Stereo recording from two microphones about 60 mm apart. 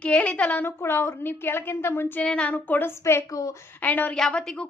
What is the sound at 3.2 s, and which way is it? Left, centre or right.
Speech, left.